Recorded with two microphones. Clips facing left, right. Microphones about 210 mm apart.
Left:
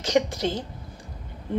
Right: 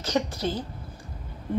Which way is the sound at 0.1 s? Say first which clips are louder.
Left 4 dB; 90° left.